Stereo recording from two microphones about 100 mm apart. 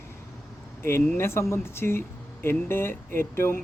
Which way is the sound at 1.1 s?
25° left (ahead or behind).